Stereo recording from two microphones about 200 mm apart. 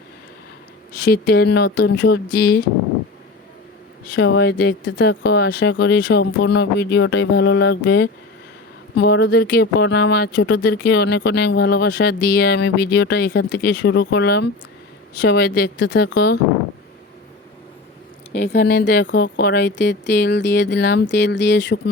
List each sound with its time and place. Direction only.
1.1 s speech: 50° left (ahead or behind)
4.1 s speech: 55° left (ahead or behind)
18.4 s speech: 55° left (ahead or behind)